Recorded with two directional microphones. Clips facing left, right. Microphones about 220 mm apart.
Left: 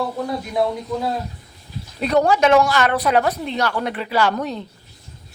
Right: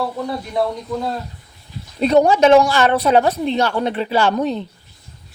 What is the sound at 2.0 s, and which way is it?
Speech, 25° right (ahead or behind).